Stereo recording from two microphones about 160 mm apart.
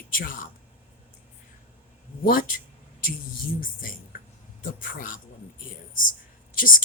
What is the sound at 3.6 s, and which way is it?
Speech, 60° left (ahead or behind).